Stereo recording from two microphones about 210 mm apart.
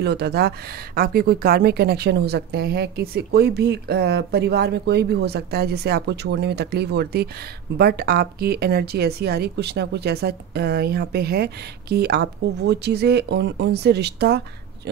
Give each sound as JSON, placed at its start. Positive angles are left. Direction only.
{"t": 0.0, "sound": "speech", "side_deg": -50}